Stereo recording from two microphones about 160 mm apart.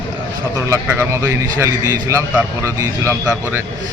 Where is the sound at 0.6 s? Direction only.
20° right (ahead or behind).